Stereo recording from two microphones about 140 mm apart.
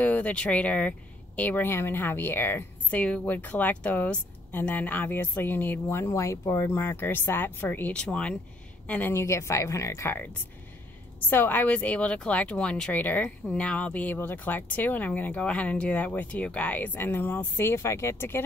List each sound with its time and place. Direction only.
0.0 s speech: 10° left (ahead or behind)